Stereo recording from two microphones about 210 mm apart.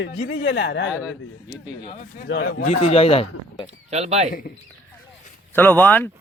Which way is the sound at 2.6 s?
30° left (ahead or behind).